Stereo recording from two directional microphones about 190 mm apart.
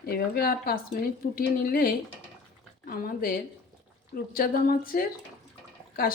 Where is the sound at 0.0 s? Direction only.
55° left (ahead or behind).